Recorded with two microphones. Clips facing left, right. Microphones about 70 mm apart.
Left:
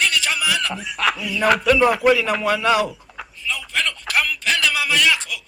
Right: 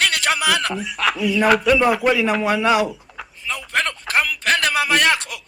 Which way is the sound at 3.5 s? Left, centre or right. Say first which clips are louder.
Right 2 dB; right.